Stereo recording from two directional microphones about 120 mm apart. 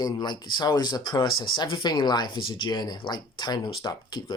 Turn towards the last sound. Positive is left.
turn(degrees=35)  # may be behind; listen again after turning